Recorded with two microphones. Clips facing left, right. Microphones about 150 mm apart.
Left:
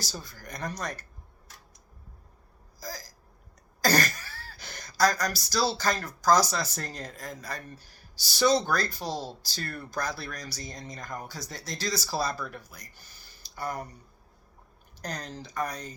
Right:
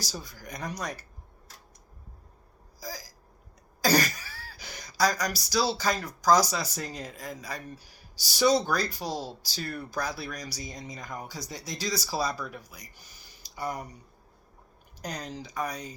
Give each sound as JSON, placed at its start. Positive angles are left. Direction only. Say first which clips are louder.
{"t": 0.1, "sound": "speech", "louder": "right 1 dB", "side_deg": -10}
{"t": 2.8, "sound": "hiccup", "louder": "even", "side_deg": -10}
{"t": 3.8, "sound": "throat clearing", "louder": "right 1 dB", "side_deg": -10}
{"t": 5.0, "sound": "speech", "louder": "left 2 dB", "side_deg": -15}
{"t": 15.0, "sound": "speech", "louder": "right 1 dB", "side_deg": -10}
{"t": 15.6, "sound": "speech", "louder": "even", "side_deg": 0}